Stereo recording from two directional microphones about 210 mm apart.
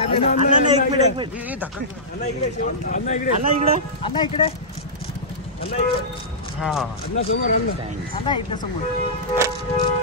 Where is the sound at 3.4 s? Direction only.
30° right (ahead or behind).